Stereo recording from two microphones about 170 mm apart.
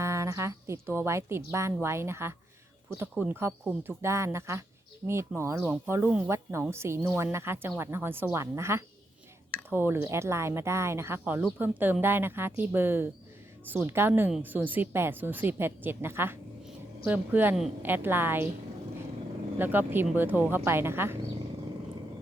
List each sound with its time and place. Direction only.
0.0 s a woman's voice: 15° right (ahead or behind)
19.5 s a woman's voice: 10° right (ahead or behind)